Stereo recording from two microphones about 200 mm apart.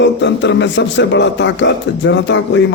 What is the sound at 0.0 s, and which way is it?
A man's voice, 65° left (ahead or behind).